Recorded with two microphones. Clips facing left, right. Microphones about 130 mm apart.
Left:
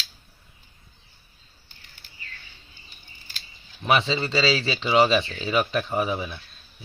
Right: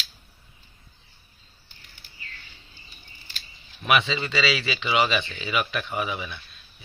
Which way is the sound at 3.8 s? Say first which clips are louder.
Left 1 dB; 30° left (ahead or behind).